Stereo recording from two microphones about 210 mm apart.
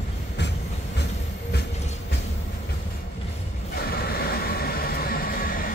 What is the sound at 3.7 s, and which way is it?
Vehicle, 45° left (ahead or behind).